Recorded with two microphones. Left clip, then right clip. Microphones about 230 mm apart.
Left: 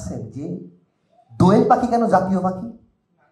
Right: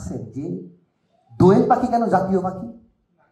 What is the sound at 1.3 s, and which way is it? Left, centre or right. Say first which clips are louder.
Speech: even; left.